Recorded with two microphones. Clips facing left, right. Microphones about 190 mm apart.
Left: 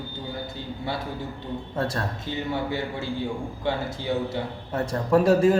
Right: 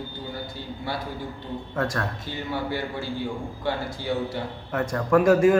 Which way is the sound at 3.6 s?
20° left (ahead or behind).